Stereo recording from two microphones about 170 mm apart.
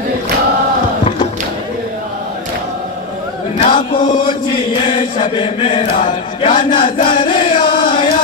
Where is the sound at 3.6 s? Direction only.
30° left (ahead or behind).